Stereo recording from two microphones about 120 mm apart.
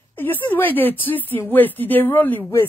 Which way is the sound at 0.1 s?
15° left (ahead or behind).